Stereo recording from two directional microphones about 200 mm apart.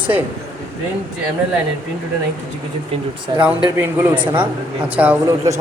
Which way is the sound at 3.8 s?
10° right (ahead or behind).